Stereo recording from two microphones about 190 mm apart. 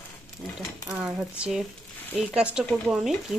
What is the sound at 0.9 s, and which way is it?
Speech, 5° right (ahead or behind).